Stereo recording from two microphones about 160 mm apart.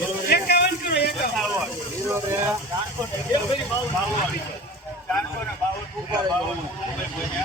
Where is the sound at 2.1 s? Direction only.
15° right (ahead or behind).